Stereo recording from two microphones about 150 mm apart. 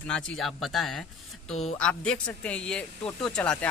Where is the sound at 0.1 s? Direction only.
5° left (ahead or behind).